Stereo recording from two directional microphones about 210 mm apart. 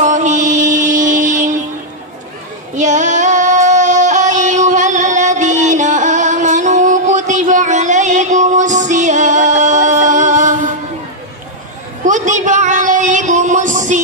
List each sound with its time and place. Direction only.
0.0 s mantra: 35° right (ahead or behind)
2.7 s female singing: 35° right (ahead or behind)
12.1 s a sound: 35° right (ahead or behind)